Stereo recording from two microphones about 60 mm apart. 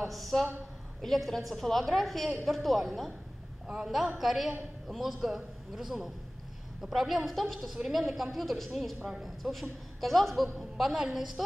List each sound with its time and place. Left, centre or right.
0.0 s a man's voice: centre
3.6 s a woman's voice: centre
4.2 s a man's voice: centre